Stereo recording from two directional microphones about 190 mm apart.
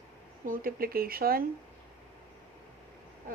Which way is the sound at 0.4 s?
50° right (ahead or behind).